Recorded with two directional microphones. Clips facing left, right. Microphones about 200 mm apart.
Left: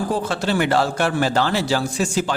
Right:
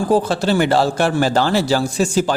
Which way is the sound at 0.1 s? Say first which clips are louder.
Right 6 dB; 35° right (ahead or behind).